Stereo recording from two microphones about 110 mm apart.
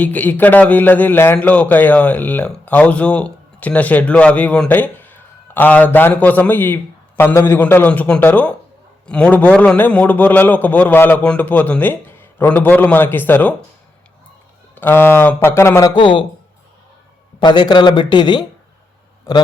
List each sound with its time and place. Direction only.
0.0 s a man's voice: 15° left (ahead or behind)
14.8 s speech: 20° left (ahead or behind)
16.0 s speech: 50° left (ahead or behind)
17.4 s speech: 45° left (ahead or behind)